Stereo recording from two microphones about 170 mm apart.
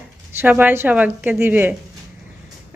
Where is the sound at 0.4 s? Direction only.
10° right (ahead or behind).